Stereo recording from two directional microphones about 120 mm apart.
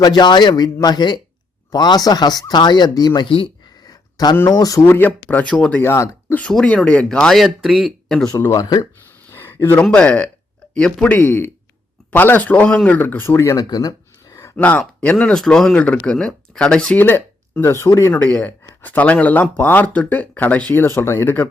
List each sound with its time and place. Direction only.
0.0 s speech: 35° left (ahead or behind)
3.8 s a sound: 35° left (ahead or behind)
4.4 s speech: 30° left (ahead or behind); by 5.8 s 10° left (ahead or behind)
5.8 s speech: 20° left (ahead or behind)
6.4 s speech: 5° left (ahead or behind)
8.3 s speech: 25° left (ahead or behind)
9.3 s a sound: 15° left (ahead or behind)
9.8 s speech: 10° left (ahead or behind)
13.7 s a sound: 35° left (ahead or behind)
14.5 s speech: 10° left (ahead or behind)
18.1 s speech: 15° left (ahead or behind)